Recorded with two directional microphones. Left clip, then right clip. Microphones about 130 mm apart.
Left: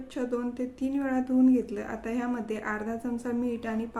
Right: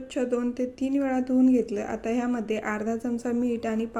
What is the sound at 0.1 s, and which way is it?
A woman's voice, 35° right (ahead or behind).